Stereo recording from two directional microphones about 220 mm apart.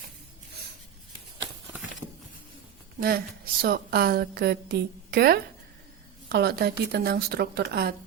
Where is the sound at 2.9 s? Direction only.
45° right (ahead or behind).